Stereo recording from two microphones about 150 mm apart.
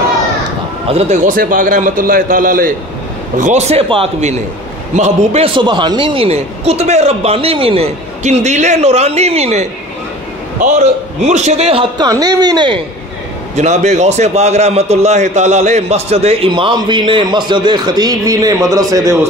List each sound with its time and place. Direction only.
0.8 s speech: 40° right (ahead or behind)
1.1 s a man's voice: 65° right (ahead or behind)
3.3 s a man's voice: 55° right (ahead or behind)
12.0 s speech: 25° right (ahead or behind)
13.6 s a man's voice: 50° right (ahead or behind); by 19.1 s 20° right (ahead or behind)